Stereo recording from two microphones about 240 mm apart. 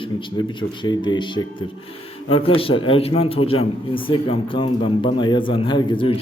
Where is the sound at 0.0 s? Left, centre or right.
Left.